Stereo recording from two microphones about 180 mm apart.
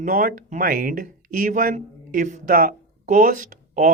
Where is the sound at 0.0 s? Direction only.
50° right (ahead or behind).